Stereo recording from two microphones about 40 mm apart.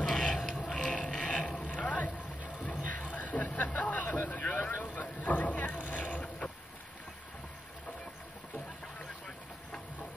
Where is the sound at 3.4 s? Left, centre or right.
Left.